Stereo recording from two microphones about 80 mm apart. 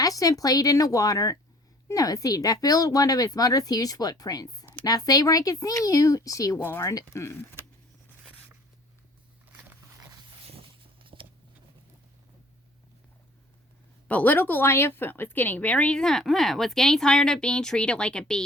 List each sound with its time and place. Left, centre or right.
0.0 s speech: left
6.6 s speech: left
6.8 s speech: left
10.0 s a sound: right
11.0 s a sound: right
14.1 s speech: left